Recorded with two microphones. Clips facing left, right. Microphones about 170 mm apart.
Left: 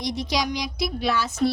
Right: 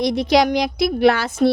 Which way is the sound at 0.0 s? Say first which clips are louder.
Right 10 dB; 60° right (ahead or behind).